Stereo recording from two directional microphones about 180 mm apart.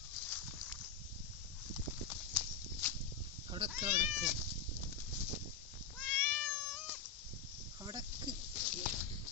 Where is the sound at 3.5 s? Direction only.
30° right (ahead or behind).